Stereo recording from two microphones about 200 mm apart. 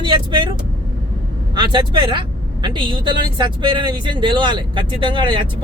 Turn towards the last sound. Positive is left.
turn(degrees=-25)  # may be behind; listen again after turning